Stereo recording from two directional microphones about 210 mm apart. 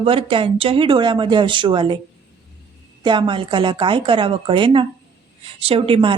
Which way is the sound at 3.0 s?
20° right (ahead or behind).